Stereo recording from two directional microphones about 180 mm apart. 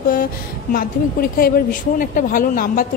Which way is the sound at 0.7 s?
50° left (ahead or behind).